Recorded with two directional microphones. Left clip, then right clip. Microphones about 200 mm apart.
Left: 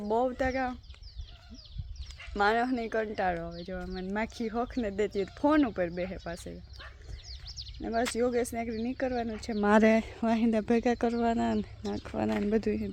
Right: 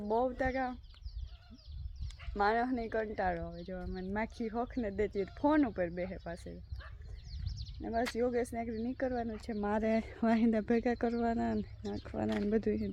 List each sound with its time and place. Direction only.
0.0 s speech: 5° left (ahead or behind)
2.3 s speech: 5° left (ahead or behind)
6.7 s dog: 55° left (ahead or behind)
7.8 s speech: 10° left (ahead or behind)
9.6 s speech: 55° left (ahead or behind)
9.9 s speech: 5° left (ahead or behind)